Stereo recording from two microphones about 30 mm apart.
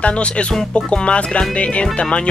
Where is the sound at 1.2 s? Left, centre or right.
Left.